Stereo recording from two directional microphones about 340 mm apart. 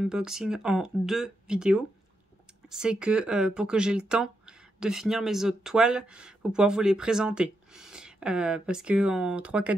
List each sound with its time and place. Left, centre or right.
0.0 s speech: centre